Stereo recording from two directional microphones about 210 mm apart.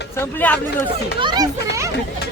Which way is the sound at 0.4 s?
10° left (ahead or behind).